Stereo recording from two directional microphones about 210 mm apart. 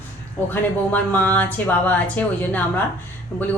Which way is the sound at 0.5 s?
10° left (ahead or behind).